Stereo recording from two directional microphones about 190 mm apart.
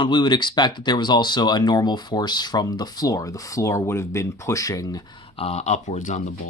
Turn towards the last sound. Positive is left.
turn(degrees=40)  # may be behind; listen again after turning